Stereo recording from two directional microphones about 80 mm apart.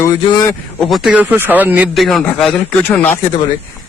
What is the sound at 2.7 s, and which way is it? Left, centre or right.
Speech, left.